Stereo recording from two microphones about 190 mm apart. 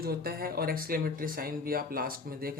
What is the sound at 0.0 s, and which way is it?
Speech, 55° right (ahead or behind).